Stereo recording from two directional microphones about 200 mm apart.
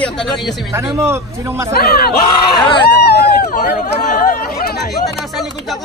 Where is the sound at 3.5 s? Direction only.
40° left (ahead or behind).